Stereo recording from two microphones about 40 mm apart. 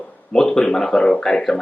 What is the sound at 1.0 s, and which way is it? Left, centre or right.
Speech, left.